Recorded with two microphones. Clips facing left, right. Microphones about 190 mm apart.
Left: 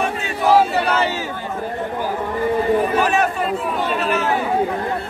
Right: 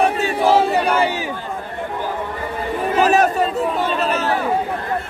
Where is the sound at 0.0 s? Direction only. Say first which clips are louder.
Right 4 dB; 35° right (ahead or behind).